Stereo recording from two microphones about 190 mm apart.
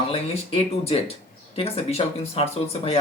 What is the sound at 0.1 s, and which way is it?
Speech, 30° left (ahead or behind).